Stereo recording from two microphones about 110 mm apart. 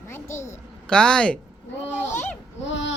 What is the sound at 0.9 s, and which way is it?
Speech, 10° left (ahead or behind).